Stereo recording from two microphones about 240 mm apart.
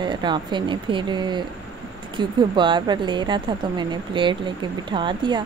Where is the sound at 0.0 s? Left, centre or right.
Centre.